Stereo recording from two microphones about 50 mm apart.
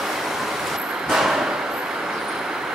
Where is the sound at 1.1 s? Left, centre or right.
Centre.